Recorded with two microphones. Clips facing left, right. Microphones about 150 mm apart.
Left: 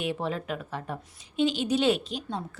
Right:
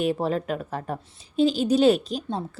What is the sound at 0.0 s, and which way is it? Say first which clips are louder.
A woman's voice: right 6 dB; 40° right (ahead or behind).